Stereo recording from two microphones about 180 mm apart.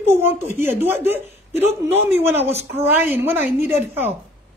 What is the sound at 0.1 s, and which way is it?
A woman's voice, 15° right (ahead or behind).